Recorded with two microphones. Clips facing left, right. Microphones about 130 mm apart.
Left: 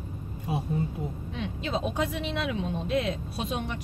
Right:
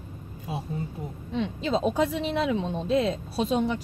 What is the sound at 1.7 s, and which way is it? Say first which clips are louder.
Speech: right 5 dB; 30° right (ahead or behind).